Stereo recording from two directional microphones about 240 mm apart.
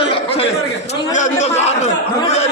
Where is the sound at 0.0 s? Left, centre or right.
Left.